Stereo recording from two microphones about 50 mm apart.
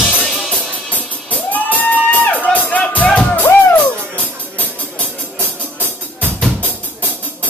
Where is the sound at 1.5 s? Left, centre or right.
Left.